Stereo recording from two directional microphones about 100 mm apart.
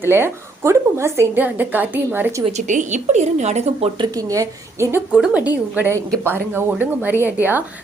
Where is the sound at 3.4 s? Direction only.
90° right.